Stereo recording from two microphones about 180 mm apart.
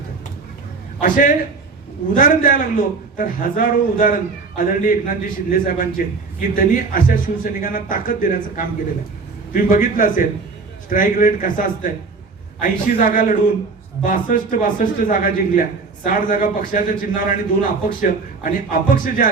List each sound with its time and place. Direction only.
1.0 s a man's voice: 50° left (ahead or behind)